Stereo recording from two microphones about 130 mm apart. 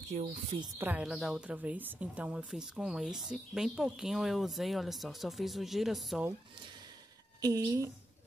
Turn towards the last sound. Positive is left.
turn(degrees=-30)  # may be behind; listen again after turning